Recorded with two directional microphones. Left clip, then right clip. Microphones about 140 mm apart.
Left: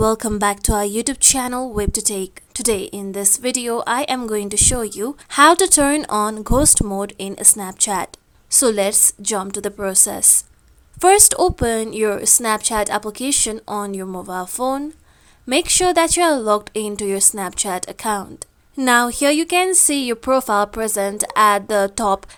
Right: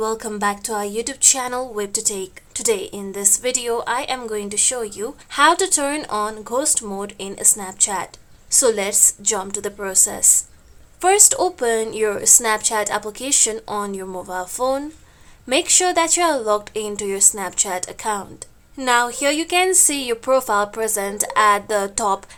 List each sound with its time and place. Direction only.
0.0 s a woman's voice: 65° left (ahead or behind)
6.8 s a woman's voice: 45° left (ahead or behind)
8.4 s a woman's voice: 40° left (ahead or behind)
13.6 s speech: 25° left (ahead or behind)
13.8 s speech: 35° left (ahead or behind)